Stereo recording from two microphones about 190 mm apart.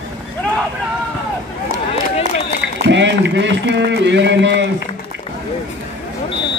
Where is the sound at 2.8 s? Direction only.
70° right (ahead or behind).